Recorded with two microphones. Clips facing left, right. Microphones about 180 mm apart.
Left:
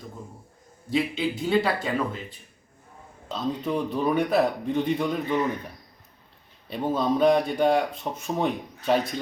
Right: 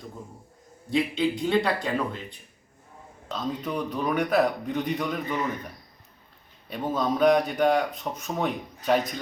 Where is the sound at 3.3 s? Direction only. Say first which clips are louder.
Left 3 dB; 25° left (ahead or behind).